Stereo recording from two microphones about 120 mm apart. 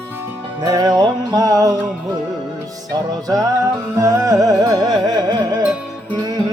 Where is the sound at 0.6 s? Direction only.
30° right (ahead or behind).